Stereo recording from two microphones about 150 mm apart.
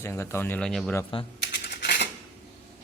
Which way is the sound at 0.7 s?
5° left (ahead or behind).